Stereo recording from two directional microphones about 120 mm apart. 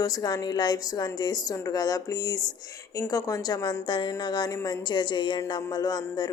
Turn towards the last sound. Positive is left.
turn(degrees=35)  # may be behind; listen again after turning